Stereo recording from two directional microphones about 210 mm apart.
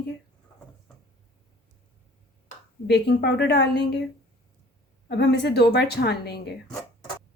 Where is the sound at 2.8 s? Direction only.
50° left (ahead or behind).